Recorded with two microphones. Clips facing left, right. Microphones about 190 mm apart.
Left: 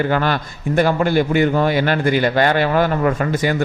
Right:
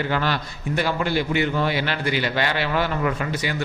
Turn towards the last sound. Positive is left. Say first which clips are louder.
# left 7 dB
turn(degrees=50)  # may be behind; listen again after turning